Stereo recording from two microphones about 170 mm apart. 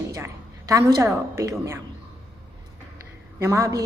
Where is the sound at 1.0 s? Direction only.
15° right (ahead or behind).